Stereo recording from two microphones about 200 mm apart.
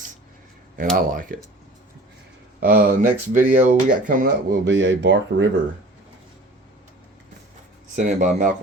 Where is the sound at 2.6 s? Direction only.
50° right (ahead or behind).